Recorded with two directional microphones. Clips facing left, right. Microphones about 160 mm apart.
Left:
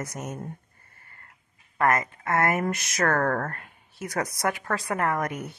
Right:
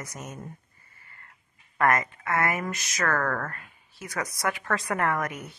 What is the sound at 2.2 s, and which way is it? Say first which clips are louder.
Speech: left 4 dB; 50° left (ahead or behind).